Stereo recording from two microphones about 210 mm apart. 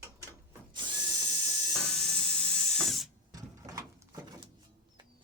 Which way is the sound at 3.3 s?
15° right (ahead or behind).